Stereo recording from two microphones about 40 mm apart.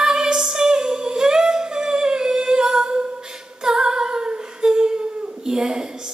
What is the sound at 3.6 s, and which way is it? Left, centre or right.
Humming, centre.